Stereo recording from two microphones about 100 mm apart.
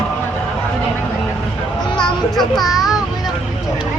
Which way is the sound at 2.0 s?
Centre (ahead or behind).